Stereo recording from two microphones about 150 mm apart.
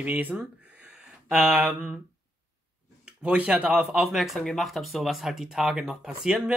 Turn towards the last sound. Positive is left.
turn(degrees=-5)  # may be behind; listen again after turning